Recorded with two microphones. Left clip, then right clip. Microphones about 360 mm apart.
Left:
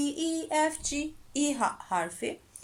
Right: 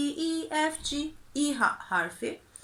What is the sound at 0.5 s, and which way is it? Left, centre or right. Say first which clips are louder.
Speech: left 3 dB; centre.